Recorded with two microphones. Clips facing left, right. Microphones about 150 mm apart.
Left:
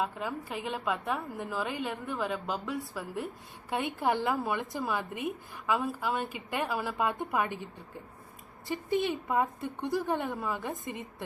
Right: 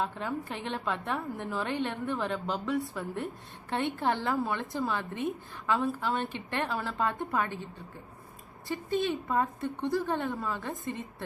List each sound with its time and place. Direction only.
0.0 s a woman's voice: 5° left (ahead or behind)